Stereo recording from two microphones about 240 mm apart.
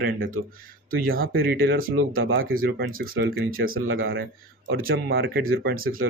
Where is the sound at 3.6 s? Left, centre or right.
Right.